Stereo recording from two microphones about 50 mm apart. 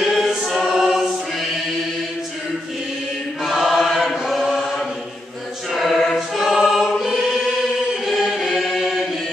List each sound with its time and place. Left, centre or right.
0.0 s choir: centre
3.4 s choir: centre
5.7 s choir: centre
6.4 s choir: centre
8.0 s chant: centre